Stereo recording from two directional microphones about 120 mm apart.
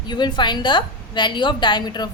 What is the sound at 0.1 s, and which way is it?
Speech, 40° left (ahead or behind).